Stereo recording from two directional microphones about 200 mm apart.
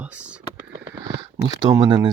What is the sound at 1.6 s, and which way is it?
Speech, 20° right (ahead or behind).